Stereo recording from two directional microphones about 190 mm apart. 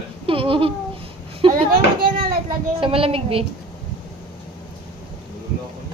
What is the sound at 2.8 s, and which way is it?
Speech, 30° right (ahead or behind).